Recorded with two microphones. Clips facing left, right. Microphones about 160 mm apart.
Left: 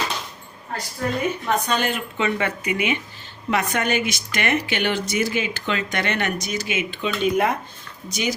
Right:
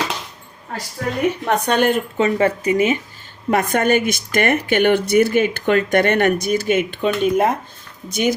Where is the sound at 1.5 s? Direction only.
60° right (ahead or behind).